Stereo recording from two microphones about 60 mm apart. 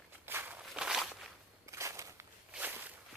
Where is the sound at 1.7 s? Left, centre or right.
Right.